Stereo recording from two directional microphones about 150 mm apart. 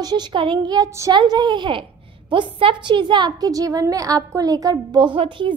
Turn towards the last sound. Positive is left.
turn(degrees=-35)  # may be behind; listen again after turning